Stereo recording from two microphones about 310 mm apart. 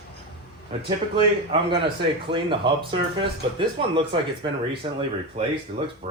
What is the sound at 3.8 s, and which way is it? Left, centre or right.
Speech, centre.